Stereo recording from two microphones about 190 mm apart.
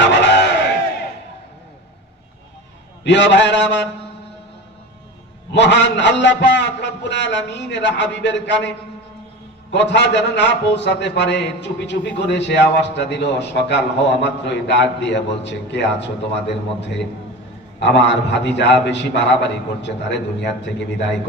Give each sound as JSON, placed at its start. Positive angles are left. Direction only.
{"t": 0.0, "sound": "crowd", "side_deg": 70}
{"t": 3.0, "sound": "a man's voice", "side_deg": 70}
{"t": 5.5, "sound": "a man's voice", "side_deg": 65}
{"t": 9.7, "sound": "a man's voice", "side_deg": 70}
{"t": 17.7, "sound": "a man's voice", "side_deg": 65}